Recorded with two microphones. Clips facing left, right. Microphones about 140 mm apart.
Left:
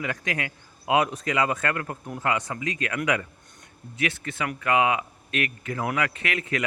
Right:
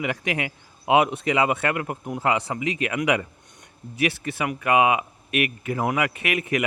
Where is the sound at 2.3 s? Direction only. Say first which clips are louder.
Right 3 dB; 25° right (ahead or behind).